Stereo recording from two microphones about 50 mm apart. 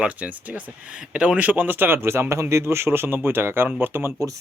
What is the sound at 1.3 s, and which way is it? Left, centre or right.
Speech, right.